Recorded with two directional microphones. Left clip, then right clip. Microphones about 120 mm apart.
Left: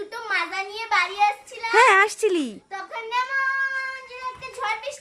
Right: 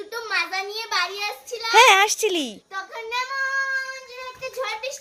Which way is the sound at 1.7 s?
5° right (ahead or behind).